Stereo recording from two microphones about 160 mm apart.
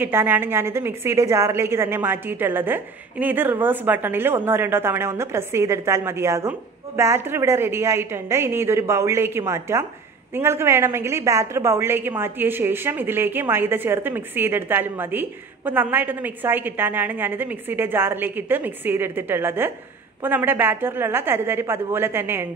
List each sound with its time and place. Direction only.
0.0 s a woman's voice: 15° right (ahead or behind)